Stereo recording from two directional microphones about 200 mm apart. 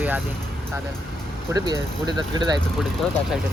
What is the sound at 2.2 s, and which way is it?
Speech, 20° right (ahead or behind).